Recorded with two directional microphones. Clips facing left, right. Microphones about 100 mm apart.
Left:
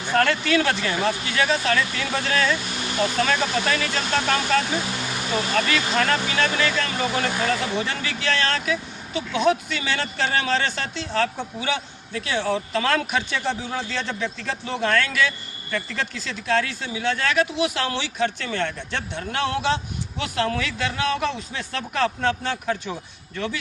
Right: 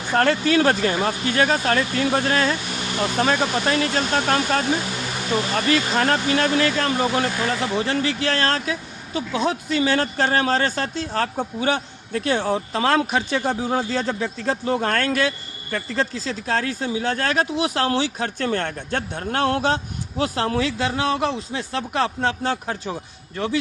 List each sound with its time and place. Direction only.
0.1 s speech: 35° right (ahead or behind)